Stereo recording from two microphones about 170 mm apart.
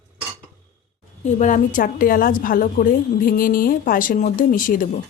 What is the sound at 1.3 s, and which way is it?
A woman's voice, 45° left (ahead or behind).